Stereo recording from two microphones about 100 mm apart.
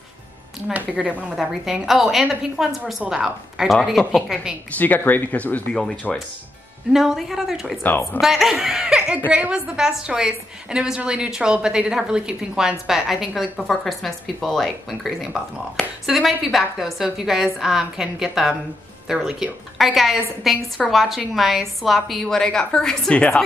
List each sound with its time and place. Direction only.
0.7 s a woman's voice: 15° right (ahead or behind)
4.6 s speech: 15° left (ahead or behind)
6.0 s a woman's voice: 5° left (ahead or behind)